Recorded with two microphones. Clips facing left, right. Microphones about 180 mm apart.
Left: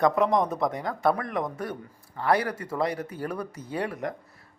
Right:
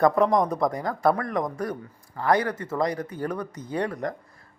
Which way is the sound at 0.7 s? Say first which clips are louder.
Right 2 dB; 25° left (ahead or behind).